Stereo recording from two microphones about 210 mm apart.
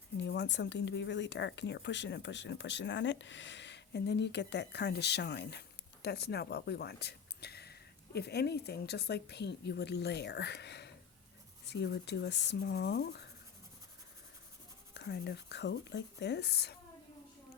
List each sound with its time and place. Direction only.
0.2 s speech: 55° left (ahead or behind)
14.9 s speech: 55° left (ahead or behind)